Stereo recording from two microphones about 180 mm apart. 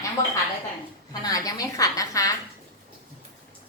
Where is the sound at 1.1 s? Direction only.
20° left (ahead or behind).